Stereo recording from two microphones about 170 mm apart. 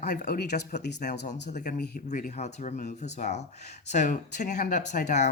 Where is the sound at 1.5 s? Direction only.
50° left (ahead or behind).